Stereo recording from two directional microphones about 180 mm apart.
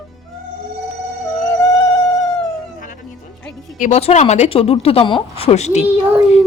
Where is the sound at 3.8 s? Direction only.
40° left (ahead or behind).